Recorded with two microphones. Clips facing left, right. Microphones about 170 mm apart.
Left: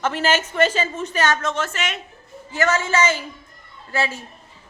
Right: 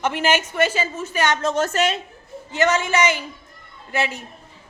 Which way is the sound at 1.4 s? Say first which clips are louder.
Right 5 dB; 40° right (ahead or behind).